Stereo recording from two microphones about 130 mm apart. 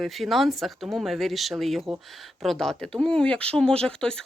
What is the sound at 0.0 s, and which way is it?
Speech, centre (ahead or behind).